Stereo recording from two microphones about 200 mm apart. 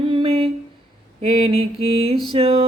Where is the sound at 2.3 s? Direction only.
30° right (ahead or behind).